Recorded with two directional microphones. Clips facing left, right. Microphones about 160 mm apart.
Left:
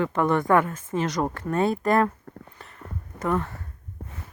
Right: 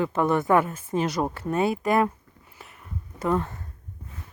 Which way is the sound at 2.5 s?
10° right (ahead or behind).